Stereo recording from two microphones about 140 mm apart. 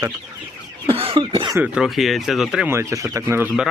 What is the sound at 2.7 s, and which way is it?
Speech, 20° right (ahead or behind).